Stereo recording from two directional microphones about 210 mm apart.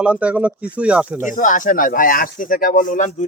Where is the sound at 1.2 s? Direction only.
40° left (ahead or behind).